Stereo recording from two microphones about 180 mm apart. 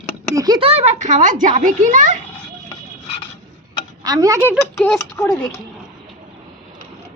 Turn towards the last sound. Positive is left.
turn(degrees=15)  # may be behind; listen again after turning